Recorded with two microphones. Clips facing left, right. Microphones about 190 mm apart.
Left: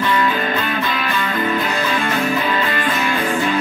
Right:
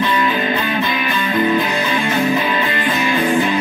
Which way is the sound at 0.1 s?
20° right (ahead or behind).